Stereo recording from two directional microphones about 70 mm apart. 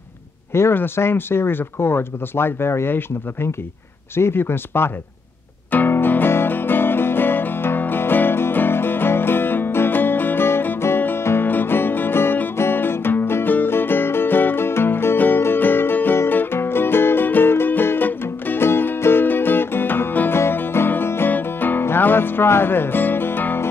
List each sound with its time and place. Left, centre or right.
0.5 s speech: left
5.7 s music: left